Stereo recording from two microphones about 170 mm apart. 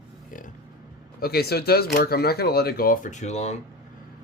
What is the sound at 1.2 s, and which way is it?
Speech, 65° left (ahead or behind).